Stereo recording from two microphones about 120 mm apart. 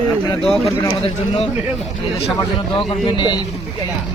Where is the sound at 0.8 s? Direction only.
50° left (ahead or behind).